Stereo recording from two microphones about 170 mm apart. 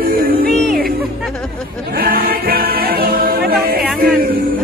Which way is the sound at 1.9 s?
60° right (ahead or behind).